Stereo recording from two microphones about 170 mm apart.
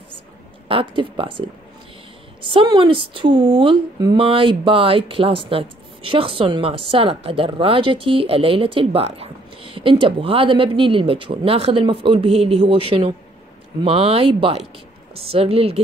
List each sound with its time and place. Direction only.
0.7 s speech: 30° right (ahead or behind)
2.5 s speech: 30° right (ahead or behind)